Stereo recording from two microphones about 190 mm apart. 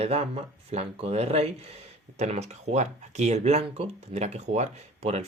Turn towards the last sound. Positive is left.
turn(degrees=-35)  # may be behind; listen again after turning